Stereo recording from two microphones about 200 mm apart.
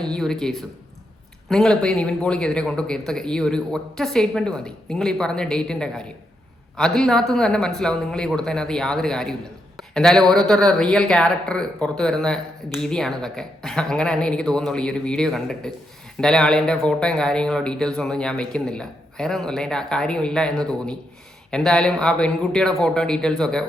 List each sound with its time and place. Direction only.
0.0 s speech: 5° left (ahead or behind)